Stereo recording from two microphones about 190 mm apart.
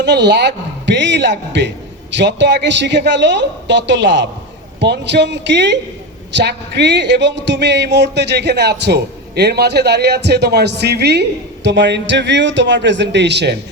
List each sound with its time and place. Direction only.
0.0 s a woman's voice: 65° right (ahead or behind)